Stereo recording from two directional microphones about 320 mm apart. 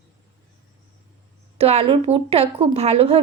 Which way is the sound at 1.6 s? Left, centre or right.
Centre.